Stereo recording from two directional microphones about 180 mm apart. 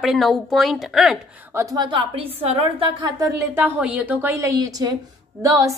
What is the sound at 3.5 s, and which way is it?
A woman's voice, 10° right (ahead or behind).